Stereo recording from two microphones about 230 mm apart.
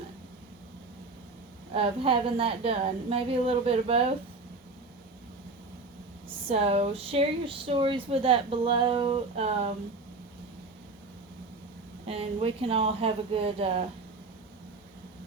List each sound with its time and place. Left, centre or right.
1.7 s speech: right
6.2 s speech: right
12.0 s speech: right